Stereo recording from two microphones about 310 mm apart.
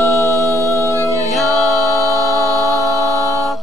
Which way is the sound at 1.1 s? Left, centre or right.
Centre.